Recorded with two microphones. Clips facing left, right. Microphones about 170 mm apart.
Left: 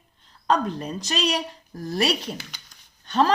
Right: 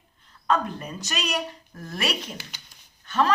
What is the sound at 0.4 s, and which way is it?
A woman's voice, 35° left (ahead or behind).